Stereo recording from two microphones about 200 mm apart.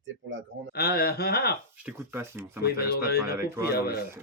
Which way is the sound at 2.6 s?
50° left (ahead or behind).